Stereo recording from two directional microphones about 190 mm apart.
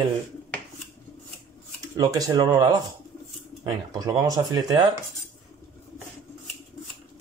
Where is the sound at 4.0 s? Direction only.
20° right (ahead or behind).